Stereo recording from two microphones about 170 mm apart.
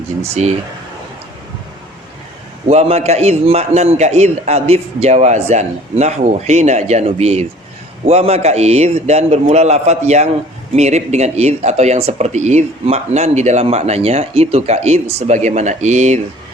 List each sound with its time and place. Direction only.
0.2 s speech: 40° right (ahead or behind)
2.6 s speech: 40° right (ahead or behind)